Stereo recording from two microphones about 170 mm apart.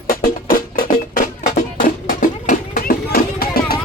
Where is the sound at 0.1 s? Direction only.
55° left (ahead or behind).